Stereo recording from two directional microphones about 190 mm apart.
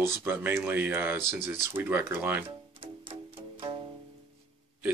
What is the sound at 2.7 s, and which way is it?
Music, 25° right (ahead or behind).